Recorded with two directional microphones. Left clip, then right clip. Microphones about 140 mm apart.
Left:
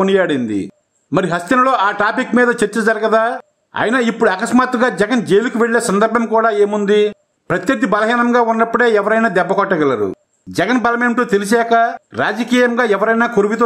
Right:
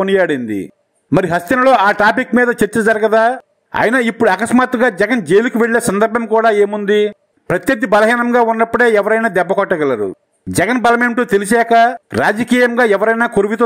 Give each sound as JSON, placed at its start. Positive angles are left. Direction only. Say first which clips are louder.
{"t": 0.0, "sound": "a man's voice", "louder": "right 1 dB", "side_deg": -35}